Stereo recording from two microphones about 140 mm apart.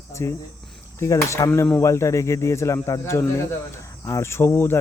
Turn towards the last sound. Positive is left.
turn(degrees=15)  # may be behind; listen again after turning